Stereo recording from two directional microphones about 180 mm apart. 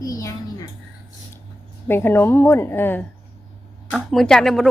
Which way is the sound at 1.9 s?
15° left (ahead or behind).